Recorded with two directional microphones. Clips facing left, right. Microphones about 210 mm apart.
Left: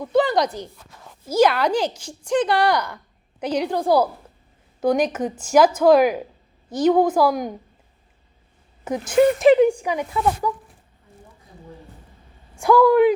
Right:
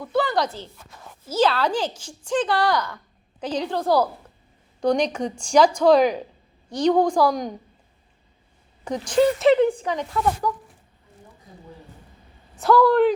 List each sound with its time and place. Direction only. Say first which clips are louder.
0.0 s a woman's voice: left 4 dB; 20° left (ahead or behind)
9.0 s speech: left 3 dB; 10° left (ahead or behind)
12.5 s speech: left 2 dB; 10° left (ahead or behind)